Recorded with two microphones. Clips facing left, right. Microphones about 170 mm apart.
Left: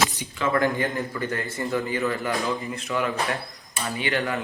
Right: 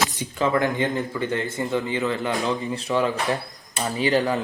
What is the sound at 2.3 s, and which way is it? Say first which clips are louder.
Speech: right 2 dB; centre (ahead or behind).